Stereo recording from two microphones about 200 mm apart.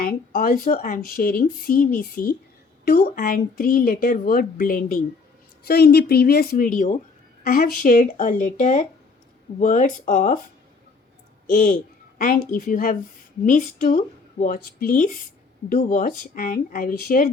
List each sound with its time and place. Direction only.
0.0 s a woman's voice: 45° left (ahead or behind)
11.5 s a child's voice: 45° left (ahead or behind)